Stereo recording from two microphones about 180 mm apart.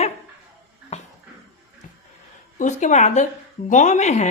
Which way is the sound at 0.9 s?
40° left (ahead or behind).